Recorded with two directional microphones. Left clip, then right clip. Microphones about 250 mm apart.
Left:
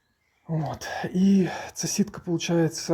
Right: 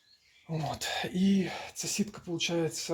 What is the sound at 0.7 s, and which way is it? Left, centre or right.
Speech, centre.